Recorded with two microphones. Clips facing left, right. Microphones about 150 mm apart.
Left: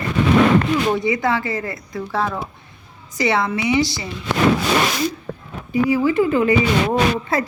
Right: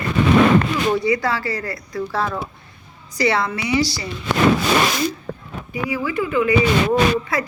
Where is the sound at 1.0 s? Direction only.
20° left (ahead or behind).